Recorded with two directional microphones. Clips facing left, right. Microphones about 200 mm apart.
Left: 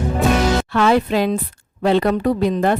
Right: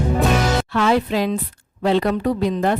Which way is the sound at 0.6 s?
55° left (ahead or behind).